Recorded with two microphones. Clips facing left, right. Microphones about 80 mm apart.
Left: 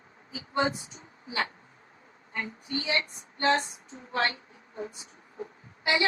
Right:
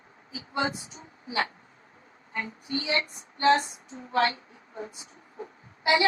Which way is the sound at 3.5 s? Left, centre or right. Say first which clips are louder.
Right 4 dB; right.